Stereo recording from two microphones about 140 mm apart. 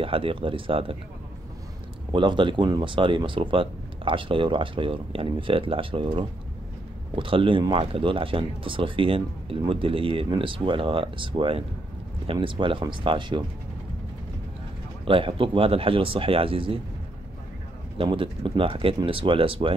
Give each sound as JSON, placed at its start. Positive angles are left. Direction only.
{"t": 0.0, "sound": "speech", "side_deg": -40}
{"t": 2.1, "sound": "speech", "side_deg": -35}
{"t": 15.0, "sound": "speech", "side_deg": -40}
{"t": 17.9, "sound": "speech", "side_deg": -40}